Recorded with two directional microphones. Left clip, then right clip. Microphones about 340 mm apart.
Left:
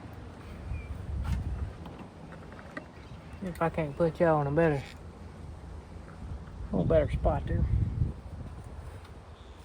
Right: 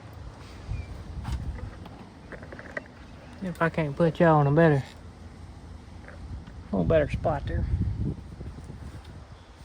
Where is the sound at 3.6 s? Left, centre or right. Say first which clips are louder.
Right 3 dB; right.